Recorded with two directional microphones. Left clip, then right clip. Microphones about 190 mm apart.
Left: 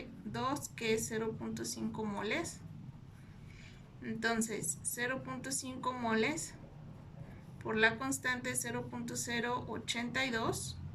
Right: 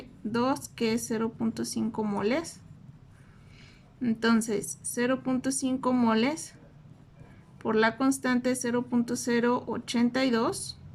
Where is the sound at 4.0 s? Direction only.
45° right (ahead or behind).